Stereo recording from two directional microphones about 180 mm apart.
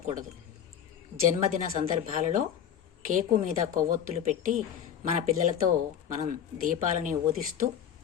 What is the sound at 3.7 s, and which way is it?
Speech, 45° right (ahead or behind).